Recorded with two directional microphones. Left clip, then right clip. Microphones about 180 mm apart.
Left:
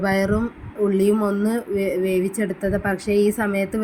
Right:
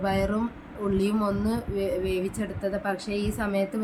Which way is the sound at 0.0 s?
25° left (ahead or behind).